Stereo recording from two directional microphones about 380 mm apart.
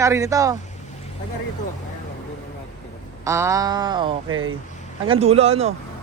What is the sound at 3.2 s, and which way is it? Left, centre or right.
Speech, centre.